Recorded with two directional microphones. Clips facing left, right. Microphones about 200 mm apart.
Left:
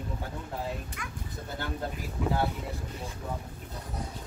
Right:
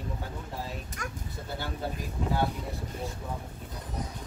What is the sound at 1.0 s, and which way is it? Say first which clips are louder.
Speech: right 3 dB; 45° right (ahead or behind).